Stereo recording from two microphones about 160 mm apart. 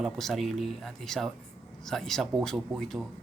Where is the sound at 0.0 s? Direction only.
Centre (ahead or behind).